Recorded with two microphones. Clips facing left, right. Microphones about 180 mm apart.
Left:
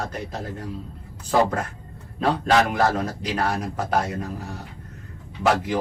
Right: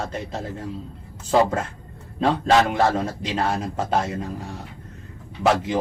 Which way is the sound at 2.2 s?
25° right (ahead or behind).